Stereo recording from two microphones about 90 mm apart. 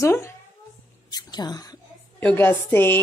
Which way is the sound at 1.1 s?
50° left (ahead or behind).